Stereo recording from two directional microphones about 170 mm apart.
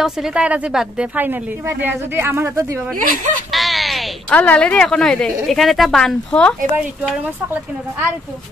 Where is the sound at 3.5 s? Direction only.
Centre (ahead or behind).